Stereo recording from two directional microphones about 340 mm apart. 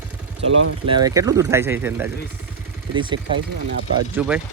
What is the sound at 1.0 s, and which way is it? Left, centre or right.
Speech, centre.